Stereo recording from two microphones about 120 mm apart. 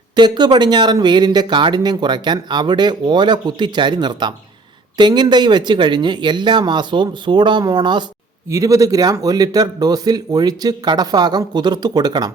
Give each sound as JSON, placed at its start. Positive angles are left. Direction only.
{"t": 0.2, "sound": "speech", "side_deg": -35}
{"t": 8.4, "sound": "speech", "side_deg": -25}